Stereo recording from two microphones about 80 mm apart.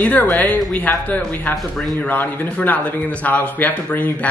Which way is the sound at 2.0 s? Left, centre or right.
Left.